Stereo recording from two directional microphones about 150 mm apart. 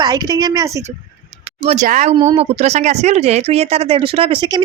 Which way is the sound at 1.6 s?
45° right (ahead or behind).